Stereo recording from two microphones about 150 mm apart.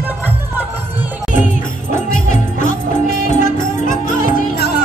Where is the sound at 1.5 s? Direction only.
60° left (ahead or behind).